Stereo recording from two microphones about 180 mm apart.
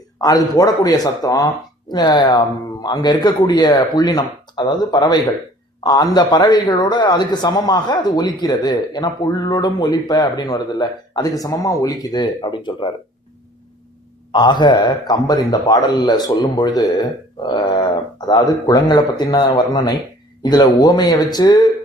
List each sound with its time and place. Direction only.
0.2 s a man's voice: 20° left (ahead or behind)
14.3 s a man's voice: 25° left (ahead or behind)